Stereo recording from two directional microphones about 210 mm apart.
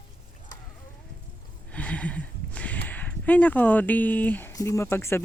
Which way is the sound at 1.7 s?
5° left (ahead or behind).